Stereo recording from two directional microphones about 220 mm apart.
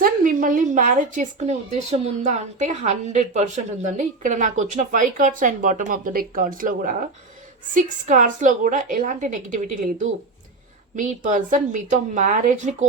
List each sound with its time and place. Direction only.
0.0 s a woman's voice: 35° right (ahead or behind)